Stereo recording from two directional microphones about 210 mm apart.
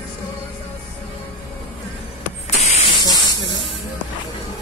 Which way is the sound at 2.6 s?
25° left (ahead or behind).